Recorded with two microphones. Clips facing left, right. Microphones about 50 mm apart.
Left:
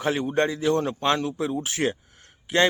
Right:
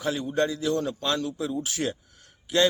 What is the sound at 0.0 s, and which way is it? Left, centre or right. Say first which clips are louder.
A man's voice: left 3 dB; left.